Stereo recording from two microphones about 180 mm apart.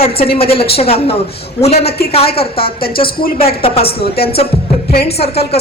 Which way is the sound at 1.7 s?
60° left (ahead or behind).